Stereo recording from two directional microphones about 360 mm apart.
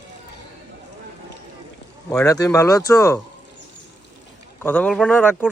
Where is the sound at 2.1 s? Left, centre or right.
Centre.